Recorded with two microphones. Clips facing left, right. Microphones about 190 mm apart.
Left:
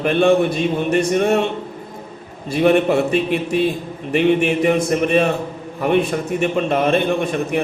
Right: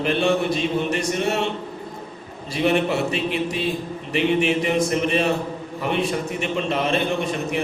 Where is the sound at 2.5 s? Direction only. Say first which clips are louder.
Left 6 dB; 55° left (ahead or behind).